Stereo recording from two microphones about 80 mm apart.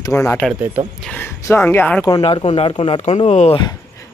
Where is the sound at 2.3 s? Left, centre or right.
Left.